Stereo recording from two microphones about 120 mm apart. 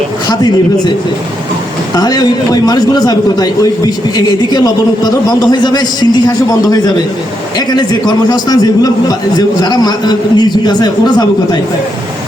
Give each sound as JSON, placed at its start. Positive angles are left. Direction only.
{"t": 2.0, "sound": "a man's voice", "side_deg": 35}